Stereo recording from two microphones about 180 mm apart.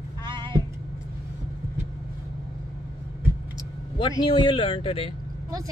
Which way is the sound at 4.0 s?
25° left (ahead or behind).